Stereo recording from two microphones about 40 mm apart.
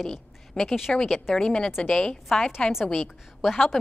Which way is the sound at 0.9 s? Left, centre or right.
Centre.